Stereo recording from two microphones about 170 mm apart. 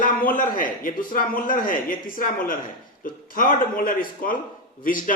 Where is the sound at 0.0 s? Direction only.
55° left (ahead or behind).